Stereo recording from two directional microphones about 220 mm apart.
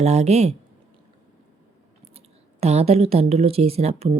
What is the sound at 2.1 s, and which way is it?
Speech, 30° right (ahead or behind).